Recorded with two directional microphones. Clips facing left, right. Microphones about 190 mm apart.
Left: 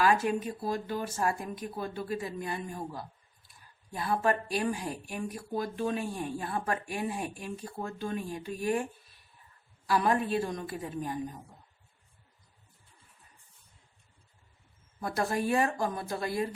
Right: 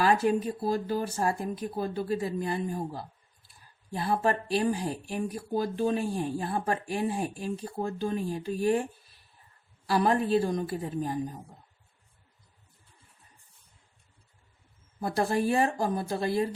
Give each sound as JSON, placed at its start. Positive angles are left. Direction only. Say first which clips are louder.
{"t": 0.0, "sound": "speech", "louder": "right 2 dB", "side_deg": -35}
{"t": 15.0, "sound": "speech", "louder": "right 4 dB", "side_deg": -30}